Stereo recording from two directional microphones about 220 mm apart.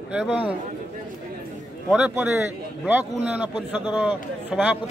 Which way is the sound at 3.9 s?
5° right (ahead or behind).